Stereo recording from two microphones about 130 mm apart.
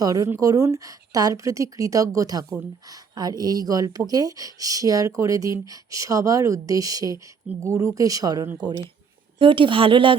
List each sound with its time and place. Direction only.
0.0 s speech: 30° right (ahead or behind)
9.4 s speech: 40° right (ahead or behind)